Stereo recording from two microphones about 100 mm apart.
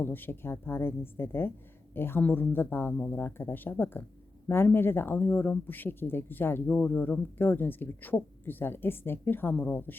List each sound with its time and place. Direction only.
0.0 s speech: 20° left (ahead or behind)